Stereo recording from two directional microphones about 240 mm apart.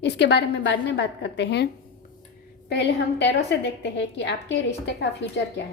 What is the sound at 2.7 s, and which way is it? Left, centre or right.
A woman's voice, left.